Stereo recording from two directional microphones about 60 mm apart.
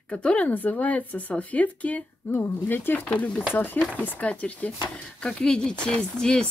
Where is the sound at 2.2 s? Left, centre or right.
Left.